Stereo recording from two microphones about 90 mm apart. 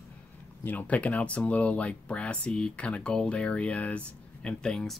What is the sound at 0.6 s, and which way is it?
Speech, 15° left (ahead or behind).